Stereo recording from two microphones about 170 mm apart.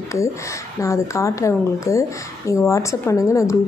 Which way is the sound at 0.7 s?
20° left (ahead or behind).